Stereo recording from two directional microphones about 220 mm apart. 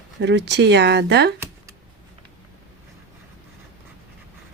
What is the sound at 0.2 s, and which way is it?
Speech, 50° right (ahead or behind).